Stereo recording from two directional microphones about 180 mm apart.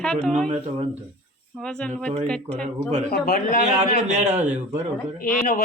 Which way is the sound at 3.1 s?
50° left (ahead or behind).